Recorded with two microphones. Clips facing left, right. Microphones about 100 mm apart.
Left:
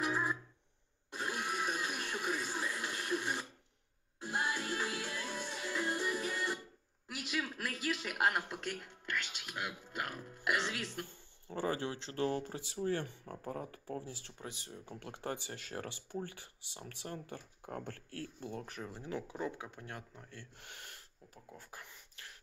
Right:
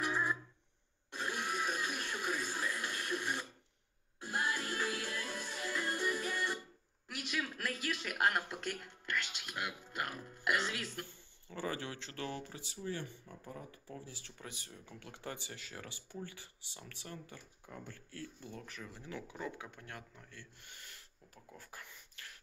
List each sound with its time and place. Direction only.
0.0 s music: 10° left (ahead or behind)
1.1 s television: 10° left (ahead or behind)
4.5 s music: 20° left (ahead or behind)
7.2 s speech: 5° left (ahead or behind)
11.4 s speech: 35° left (ahead or behind)
14.4 s speech: 25° left (ahead or behind)
15.0 s speech: 45° left (ahead or behind)
16.7 s speech: 35° left (ahead or behind)
17.6 s speech: 65° left (ahead or behind)
18.2 s speech: 50° left (ahead or behind)
18.8 s speech: 35° left (ahead or behind)
20.5 s speech: 75° left (ahead or behind)
21.5 s speech: 20° left (ahead or behind)